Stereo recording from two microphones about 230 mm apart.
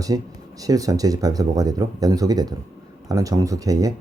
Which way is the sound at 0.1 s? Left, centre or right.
Centre.